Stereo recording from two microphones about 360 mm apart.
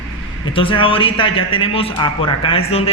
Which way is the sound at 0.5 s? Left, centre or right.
Centre.